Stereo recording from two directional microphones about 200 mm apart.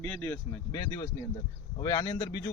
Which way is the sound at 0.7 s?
20° left (ahead or behind).